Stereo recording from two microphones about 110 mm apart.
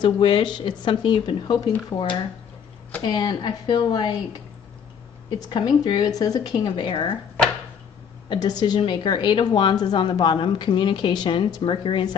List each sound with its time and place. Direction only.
0.0 s a woman's voice: 45° left (ahead or behind)
5.4 s speech: 40° left (ahead or behind)
6.4 s a woman's voice: 50° left (ahead or behind)
8.3 s a woman's voice: 40° left (ahead or behind)